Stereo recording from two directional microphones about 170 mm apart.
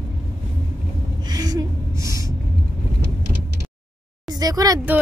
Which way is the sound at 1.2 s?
25° right (ahead or behind).